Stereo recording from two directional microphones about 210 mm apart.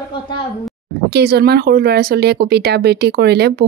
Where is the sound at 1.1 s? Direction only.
50° right (ahead or behind).